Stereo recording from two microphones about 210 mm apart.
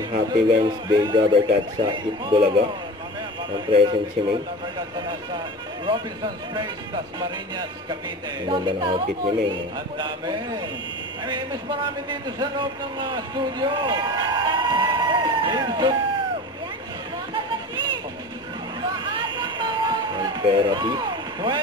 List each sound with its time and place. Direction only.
0.1 s a man's voice: 25° right (ahead or behind)
7.2 s a man's voice: 20° right (ahead or behind)
19.0 s a sound: 20° right (ahead or behind)